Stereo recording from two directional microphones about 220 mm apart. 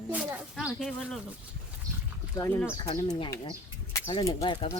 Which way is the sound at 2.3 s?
15° left (ahead or behind).